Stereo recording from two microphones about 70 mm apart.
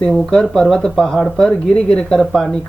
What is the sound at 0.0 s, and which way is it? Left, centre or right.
Speech, centre.